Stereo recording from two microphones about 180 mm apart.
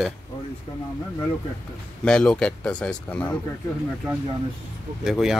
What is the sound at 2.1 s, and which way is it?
Speech, 5° left (ahead or behind).